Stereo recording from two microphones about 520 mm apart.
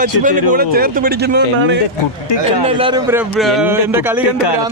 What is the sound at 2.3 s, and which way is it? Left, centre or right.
Speech, left.